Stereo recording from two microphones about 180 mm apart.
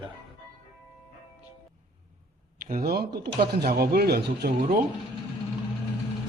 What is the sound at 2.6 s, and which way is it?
Speech, 50° right (ahead or behind).